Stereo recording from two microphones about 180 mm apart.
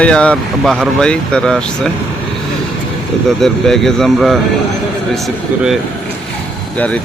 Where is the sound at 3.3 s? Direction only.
Centre (ahead or behind).